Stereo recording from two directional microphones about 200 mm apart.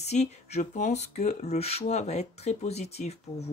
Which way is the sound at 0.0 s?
35° left (ahead or behind).